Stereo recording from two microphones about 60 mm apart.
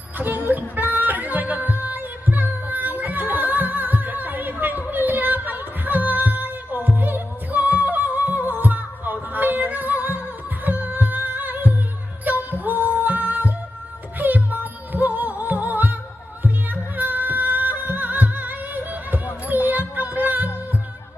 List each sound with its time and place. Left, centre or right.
0.2 s music: right
19.7 s a sound: right
20.2 s music: right